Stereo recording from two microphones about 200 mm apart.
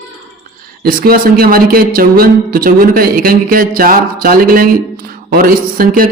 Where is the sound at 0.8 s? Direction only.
45° right (ahead or behind).